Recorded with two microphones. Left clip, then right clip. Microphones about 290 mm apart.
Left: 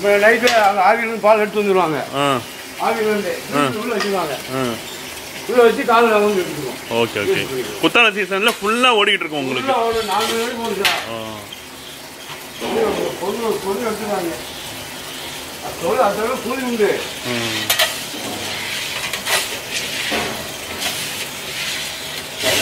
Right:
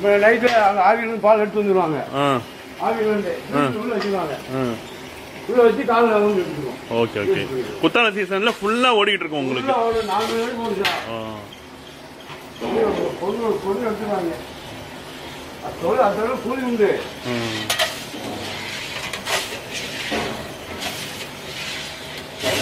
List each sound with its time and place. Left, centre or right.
0.0 s speech: centre
12.6 s speech: centre
12.9 s speech: right
15.9 s speech: centre
19.0 s a sound: centre
21.5 s vehicle: centre